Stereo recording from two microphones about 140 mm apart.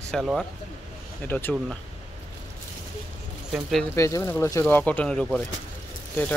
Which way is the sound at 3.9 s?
20° left (ahead or behind).